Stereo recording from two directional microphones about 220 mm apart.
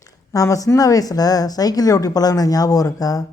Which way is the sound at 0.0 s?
15° left (ahead or behind).